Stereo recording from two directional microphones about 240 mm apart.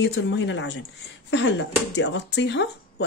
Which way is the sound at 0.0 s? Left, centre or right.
Left.